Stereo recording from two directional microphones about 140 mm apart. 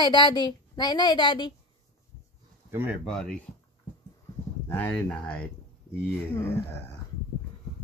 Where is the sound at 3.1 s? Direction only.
5° left (ahead or behind).